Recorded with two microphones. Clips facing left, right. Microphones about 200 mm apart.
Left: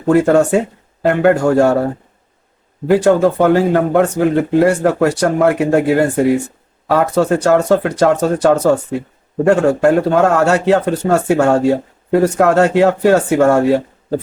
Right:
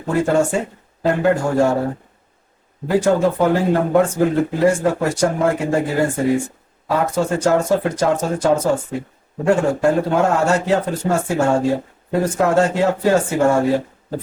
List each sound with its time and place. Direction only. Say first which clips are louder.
0.1 s speech: left 6 dB; 70° left (ahead or behind)
2.9 s speech: left 5 dB; 70° left (ahead or behind)